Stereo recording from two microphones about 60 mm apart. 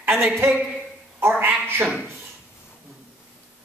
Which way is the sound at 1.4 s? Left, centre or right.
Right.